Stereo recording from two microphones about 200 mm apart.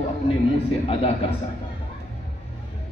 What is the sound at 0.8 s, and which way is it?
Speech, 30° left (ahead or behind).